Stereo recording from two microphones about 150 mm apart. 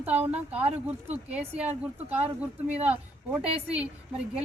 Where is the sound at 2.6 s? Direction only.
45° right (ahead or behind).